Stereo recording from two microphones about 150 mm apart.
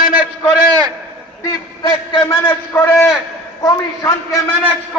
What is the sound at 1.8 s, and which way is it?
Speech, 30° left (ahead or behind).